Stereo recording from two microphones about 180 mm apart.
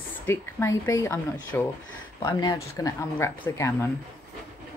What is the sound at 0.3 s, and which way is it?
A woman's voice, 15° left (ahead or behind).